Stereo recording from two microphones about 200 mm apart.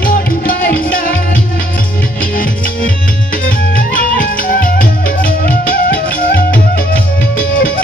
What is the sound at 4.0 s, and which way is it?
Music, 45° left (ahead or behind).